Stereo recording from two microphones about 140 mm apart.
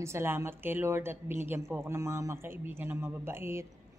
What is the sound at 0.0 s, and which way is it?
Speech, 20° right (ahead or behind).